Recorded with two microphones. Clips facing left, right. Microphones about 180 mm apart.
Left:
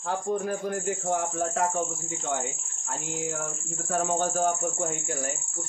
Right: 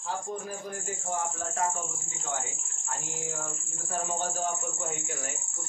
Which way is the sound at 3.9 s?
60° left (ahead or behind).